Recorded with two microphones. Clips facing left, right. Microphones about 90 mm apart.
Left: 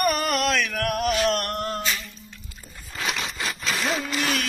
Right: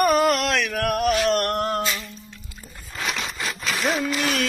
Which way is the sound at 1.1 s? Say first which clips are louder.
Right 3 dB; 50° right (ahead or behind).